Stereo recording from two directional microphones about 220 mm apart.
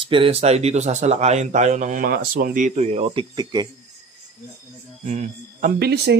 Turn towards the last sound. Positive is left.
turn(degrees=-45)  # may be behind; listen again after turning